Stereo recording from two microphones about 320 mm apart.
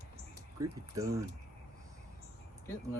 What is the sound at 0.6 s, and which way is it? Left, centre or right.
Speech, centre.